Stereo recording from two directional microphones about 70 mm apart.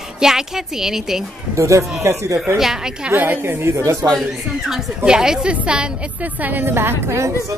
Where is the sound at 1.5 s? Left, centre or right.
Right.